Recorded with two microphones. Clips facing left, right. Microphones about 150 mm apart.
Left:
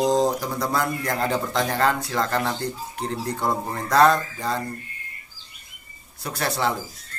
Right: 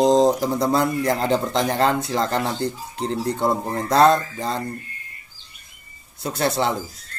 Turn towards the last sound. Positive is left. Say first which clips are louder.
# right 3 dB
turn(degrees=-25)  # may be behind; listen again after turning